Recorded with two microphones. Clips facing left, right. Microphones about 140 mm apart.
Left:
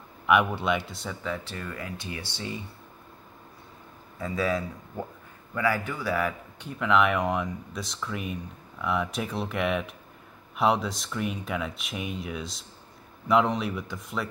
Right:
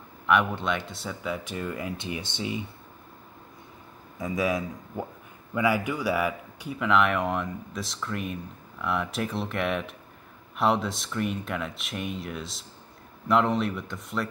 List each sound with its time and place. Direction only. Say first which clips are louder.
0.3 s speech: left 1 dB; 5° left (ahead or behind); by 2.6 s 20° right (ahead or behind)
4.2 s speech: right 1 dB; 15° right (ahead or behind); by 14.2 s centre (ahead or behind)